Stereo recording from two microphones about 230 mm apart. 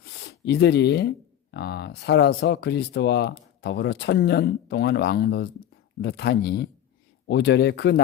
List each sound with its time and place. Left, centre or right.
0.0 s speech: left